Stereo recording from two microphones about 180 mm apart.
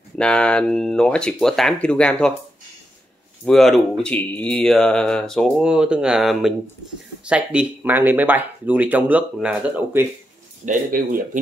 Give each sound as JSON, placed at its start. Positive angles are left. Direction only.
{"t": 0.2, "sound": "speech", "side_deg": 5}
{"t": 3.4, "sound": "speech", "side_deg": 0}
{"t": 10.6, "sound": "speech", "side_deg": -45}